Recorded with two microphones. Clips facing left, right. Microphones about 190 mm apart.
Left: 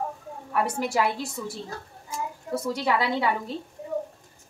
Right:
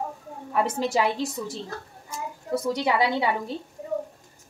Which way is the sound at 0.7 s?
20° right (ahead or behind).